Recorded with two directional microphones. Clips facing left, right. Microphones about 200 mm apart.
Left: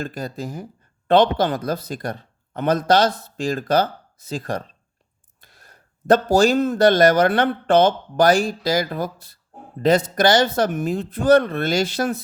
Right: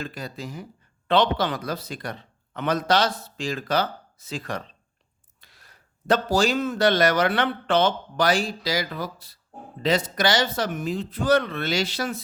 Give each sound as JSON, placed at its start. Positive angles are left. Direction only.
{"t": 0.0, "sound": "speech", "side_deg": 45}